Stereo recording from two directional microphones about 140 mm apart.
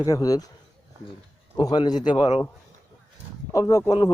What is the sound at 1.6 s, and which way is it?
Speech, 30° left (ahead or behind).